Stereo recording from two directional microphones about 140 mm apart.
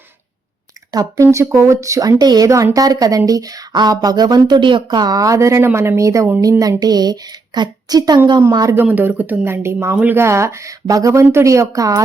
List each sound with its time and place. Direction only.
0.9 s a woman's voice: 25° right (ahead or behind)
8.8 s a woman's voice: 10° right (ahead or behind)